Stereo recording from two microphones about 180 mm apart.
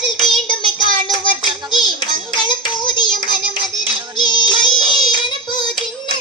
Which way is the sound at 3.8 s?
25° left (ahead or behind).